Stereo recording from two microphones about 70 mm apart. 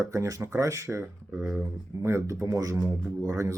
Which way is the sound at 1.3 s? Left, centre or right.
Centre.